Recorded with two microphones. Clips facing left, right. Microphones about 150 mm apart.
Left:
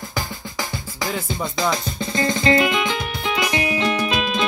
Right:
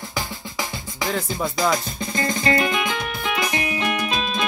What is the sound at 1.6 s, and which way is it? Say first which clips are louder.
Music: even; 25° left (ahead or behind).